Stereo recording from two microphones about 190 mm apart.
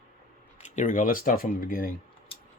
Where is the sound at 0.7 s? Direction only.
40° left (ahead or behind).